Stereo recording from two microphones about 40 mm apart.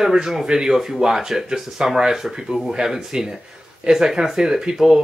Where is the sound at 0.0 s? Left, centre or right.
Centre.